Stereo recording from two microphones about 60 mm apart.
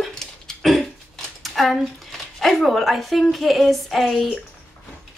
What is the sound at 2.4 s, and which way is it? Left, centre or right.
Speech, centre.